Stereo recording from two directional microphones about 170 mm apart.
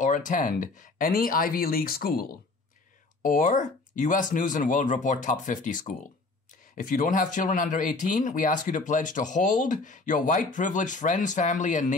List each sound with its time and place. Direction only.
0.0 s speech: 45° left (ahead or behind)
3.2 s speech: 50° left (ahead or behind)